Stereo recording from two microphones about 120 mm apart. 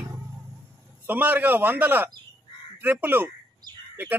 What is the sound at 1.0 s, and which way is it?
A man's voice, 15° right (ahead or behind).